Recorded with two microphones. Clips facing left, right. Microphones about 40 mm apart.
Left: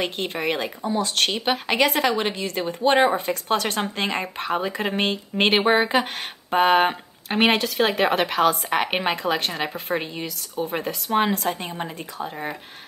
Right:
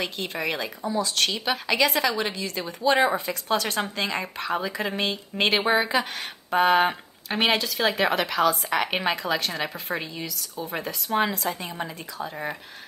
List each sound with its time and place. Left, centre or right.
0.0 s speech: left